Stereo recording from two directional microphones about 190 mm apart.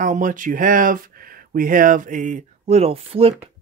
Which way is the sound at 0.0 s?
45° right (ahead or behind).